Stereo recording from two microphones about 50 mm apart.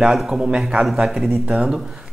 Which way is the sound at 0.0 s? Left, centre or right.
Centre.